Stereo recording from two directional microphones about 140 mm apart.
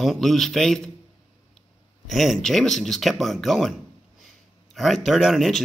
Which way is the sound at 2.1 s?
Centre (ahead or behind).